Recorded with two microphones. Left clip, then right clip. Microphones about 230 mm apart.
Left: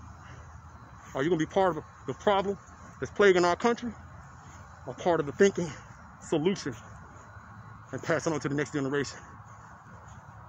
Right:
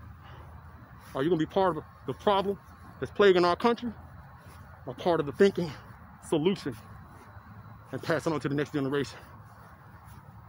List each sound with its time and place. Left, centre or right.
1.1 s speech: centre
7.9 s speech: centre